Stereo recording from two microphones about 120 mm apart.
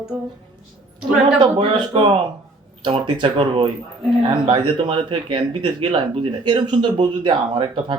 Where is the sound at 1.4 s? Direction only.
45° right (ahead or behind).